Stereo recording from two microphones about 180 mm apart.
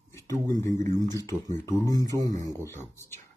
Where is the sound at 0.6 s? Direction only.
15° left (ahead or behind).